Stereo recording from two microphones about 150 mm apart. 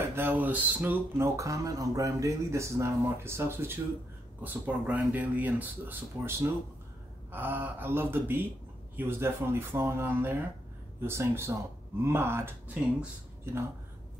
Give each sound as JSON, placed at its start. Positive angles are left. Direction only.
{"t": 0.0, "sound": "speech", "side_deg": -15}